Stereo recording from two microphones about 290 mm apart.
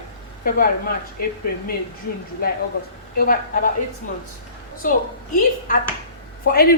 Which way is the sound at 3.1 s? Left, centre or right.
Left.